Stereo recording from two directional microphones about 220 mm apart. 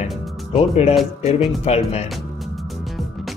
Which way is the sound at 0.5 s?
30° left (ahead or behind).